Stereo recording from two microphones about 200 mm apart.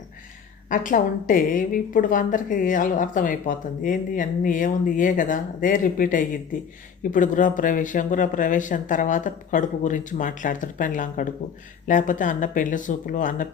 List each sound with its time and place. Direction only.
0.7 s a woman's voice: 40° left (ahead or behind)